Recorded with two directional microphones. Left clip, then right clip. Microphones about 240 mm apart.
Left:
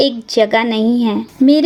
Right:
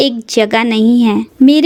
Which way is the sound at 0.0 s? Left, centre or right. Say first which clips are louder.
Right 1 dB; right.